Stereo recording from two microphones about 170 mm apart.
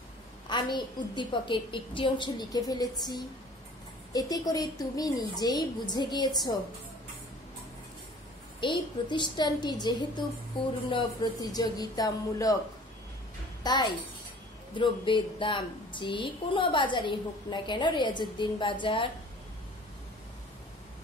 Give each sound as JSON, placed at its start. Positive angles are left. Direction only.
{"t": 0.5, "sound": "a woman's voice", "side_deg": 25}
{"t": 8.5, "sound": "a woman's voice", "side_deg": 30}
{"t": 11.5, "sound": "a woman's voice", "side_deg": 25}
{"t": 13.7, "sound": "a woman's voice", "side_deg": 25}